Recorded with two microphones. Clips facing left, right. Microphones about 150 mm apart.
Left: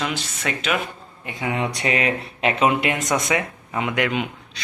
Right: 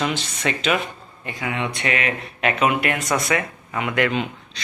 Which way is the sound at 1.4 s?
35° left (ahead or behind).